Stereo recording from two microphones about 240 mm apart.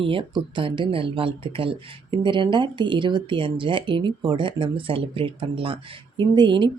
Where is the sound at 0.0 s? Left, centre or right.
Right.